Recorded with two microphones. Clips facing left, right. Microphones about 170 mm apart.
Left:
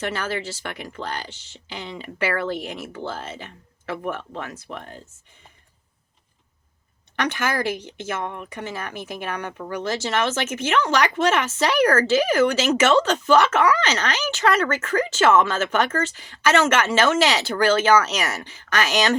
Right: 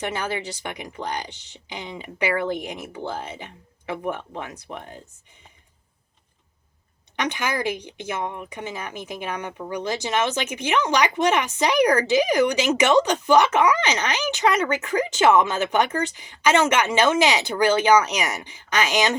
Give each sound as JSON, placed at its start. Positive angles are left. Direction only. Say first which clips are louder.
{"t": 0.0, "sound": "speech", "louder": "even", "side_deg": -15}
{"t": 7.2, "sound": "speech", "louder": "left 1 dB", "side_deg": -15}